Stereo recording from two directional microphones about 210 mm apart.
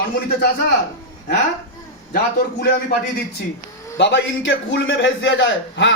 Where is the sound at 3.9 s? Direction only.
55° left (ahead or behind).